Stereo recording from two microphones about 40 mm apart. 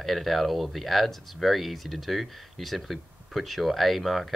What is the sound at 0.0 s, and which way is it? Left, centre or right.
Speech, centre.